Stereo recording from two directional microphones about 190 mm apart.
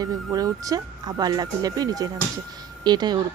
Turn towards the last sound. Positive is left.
turn(degrees=-20)  # may be behind; listen again after turning